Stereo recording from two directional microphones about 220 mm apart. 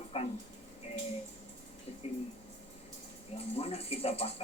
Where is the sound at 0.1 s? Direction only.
25° left (ahead or behind).